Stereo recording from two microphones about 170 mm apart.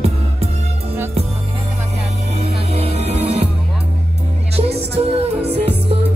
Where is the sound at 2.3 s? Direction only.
40° right (ahead or behind).